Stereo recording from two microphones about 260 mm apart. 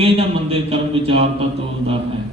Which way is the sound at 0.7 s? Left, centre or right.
Right.